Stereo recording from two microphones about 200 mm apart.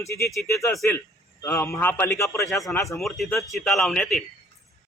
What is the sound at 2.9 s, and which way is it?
A man's voice, centre (ahead or behind).